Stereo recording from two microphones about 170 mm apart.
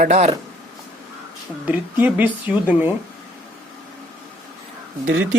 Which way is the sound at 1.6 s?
10° right (ahead or behind).